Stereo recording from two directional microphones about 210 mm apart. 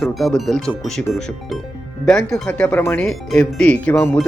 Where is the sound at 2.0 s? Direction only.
5° left (ahead or behind).